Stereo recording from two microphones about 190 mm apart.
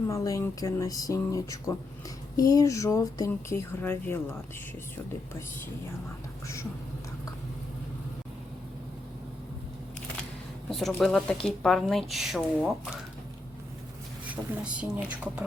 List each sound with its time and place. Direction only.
0.1 s speech: 15° left (ahead or behind)
10.7 s speech: centre (ahead or behind)
14.3 s speech: 5° right (ahead or behind)